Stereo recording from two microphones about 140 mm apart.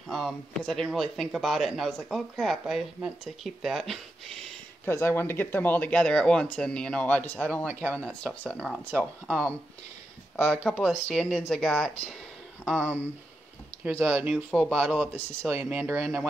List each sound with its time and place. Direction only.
0.1 s speech: centre (ahead or behind)
4.8 s speech: 15° left (ahead or behind); by 12.9 s centre (ahead or behind)
13.8 s speech: 15° right (ahead or behind)